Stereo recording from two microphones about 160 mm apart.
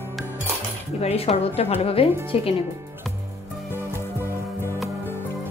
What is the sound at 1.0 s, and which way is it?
A woman's voice, 40° left (ahead or behind).